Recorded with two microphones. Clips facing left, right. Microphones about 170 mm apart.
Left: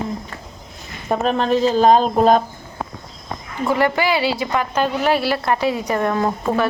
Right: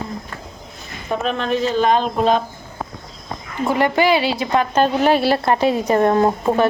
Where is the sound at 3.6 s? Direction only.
20° right (ahead or behind).